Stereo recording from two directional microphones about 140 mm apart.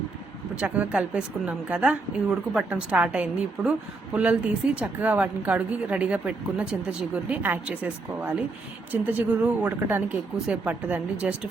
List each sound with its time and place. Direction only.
0.5 s a woman's voice: 10° right (ahead or behind)